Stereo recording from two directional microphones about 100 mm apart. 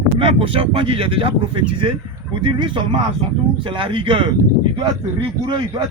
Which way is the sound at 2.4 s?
55° right (ahead or behind).